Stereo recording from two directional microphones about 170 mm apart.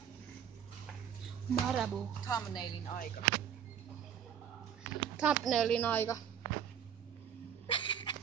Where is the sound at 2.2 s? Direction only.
20° left (ahead or behind).